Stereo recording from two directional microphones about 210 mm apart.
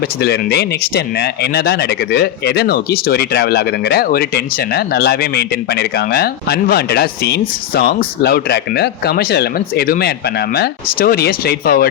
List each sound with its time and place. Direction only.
0.2 s speech: 50° left (ahead or behind)